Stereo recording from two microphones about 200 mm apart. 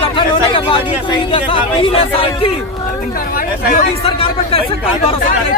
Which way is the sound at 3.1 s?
45° left (ahead or behind).